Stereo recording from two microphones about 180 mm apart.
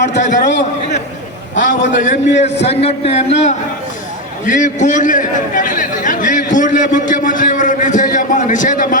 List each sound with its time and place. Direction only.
0.1 s a man's voice: 45° left (ahead or behind)
1.6 s a man's voice: 40° left (ahead or behind)
4.4 s a sound: 45° left (ahead or behind)